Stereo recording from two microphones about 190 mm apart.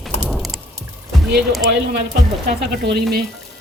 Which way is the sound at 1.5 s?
Centre (ahead or behind).